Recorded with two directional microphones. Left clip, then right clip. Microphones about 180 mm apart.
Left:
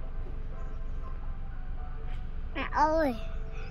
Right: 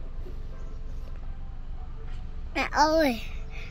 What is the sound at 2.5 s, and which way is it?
Speech, 45° right (ahead or behind).